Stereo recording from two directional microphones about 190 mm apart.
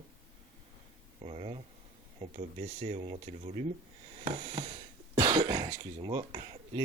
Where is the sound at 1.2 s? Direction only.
30° right (ahead or behind).